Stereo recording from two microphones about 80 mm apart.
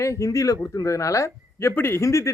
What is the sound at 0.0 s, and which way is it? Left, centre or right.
A man's voice, left.